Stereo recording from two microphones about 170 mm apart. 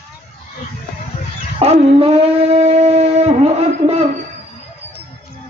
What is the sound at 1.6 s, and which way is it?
Dog, 35° right (ahead or behind).